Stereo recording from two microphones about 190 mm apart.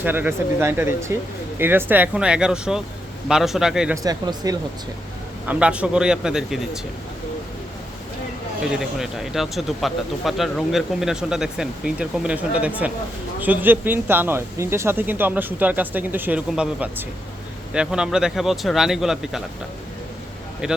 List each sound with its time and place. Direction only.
0.0 s speech: 10° right (ahead or behind)
3.9 s speech: 20° right (ahead or behind)
5.5 s speech: 5° right (ahead or behind)
8.6 s speech: centre (ahead or behind)
20.6 s speech: 5° right (ahead or behind)